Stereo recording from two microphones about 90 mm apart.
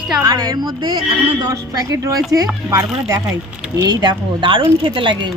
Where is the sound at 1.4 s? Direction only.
40° right (ahead or behind).